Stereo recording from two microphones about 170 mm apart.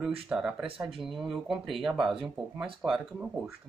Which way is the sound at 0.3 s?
5° right (ahead or behind).